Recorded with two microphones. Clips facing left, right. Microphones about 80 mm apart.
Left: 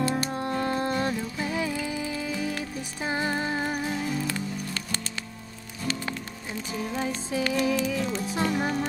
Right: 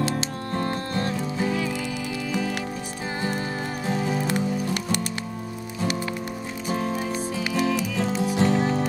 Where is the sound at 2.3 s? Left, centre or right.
Right.